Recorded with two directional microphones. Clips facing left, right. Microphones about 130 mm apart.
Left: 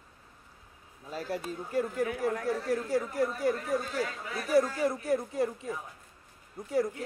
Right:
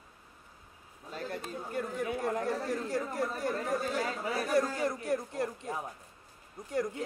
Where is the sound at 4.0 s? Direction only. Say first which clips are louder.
Right 1 dB; 35° right (ahead or behind).